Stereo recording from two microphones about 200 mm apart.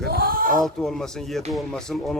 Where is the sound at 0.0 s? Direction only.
50° right (ahead or behind).